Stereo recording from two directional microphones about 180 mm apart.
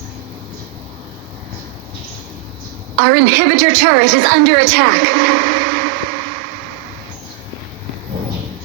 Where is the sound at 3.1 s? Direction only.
65° right (ahead or behind).